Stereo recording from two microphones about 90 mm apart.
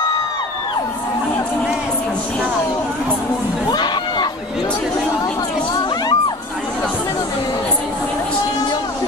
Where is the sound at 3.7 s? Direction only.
50° left (ahead or behind).